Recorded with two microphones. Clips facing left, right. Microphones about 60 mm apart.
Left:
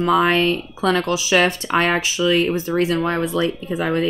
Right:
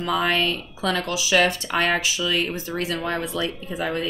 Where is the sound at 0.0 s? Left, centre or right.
Left.